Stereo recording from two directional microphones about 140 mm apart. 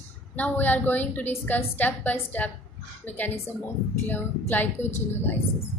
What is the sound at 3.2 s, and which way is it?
A woman's voice, 15° left (ahead or behind).